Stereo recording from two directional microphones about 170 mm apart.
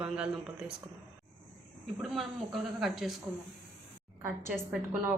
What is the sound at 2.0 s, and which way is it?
A man's voice, centre (ahead or behind).